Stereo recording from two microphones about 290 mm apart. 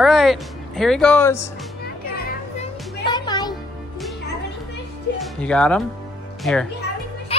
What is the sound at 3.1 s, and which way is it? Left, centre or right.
Music, centre.